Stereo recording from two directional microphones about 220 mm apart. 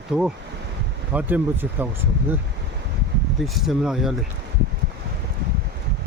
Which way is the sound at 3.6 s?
Centre (ahead or behind).